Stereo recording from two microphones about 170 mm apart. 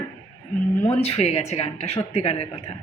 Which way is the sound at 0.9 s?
40° left (ahead or behind).